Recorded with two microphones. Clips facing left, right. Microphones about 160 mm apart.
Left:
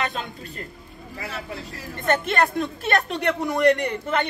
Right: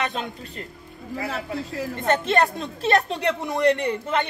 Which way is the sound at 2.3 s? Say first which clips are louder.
Right 1 dB; 25° right (ahead or behind).